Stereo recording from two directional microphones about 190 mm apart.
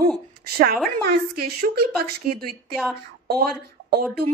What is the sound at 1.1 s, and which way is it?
Speech, 55° right (ahead or behind).